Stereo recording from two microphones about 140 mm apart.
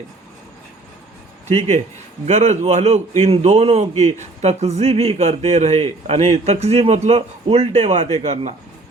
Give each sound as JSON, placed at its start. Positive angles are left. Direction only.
{"t": 1.5, "sound": "a man's voice", "side_deg": -50}